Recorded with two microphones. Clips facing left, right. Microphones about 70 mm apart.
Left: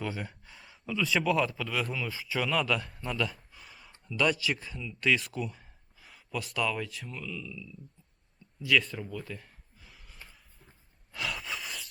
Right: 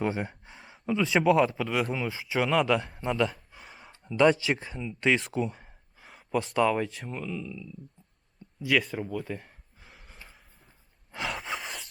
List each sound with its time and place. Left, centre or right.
0.0 s speech: right
3.7 s a sound: right
4.0 s speech: right
5.3 s gasp: right
6.6 s speech: right
8.6 s speech: centre
9.9 s a sound: centre
11.1 s sigh: right
11.4 s a sound: right